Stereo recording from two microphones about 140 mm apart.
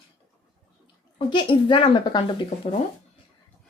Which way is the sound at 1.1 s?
35° left (ahead or behind).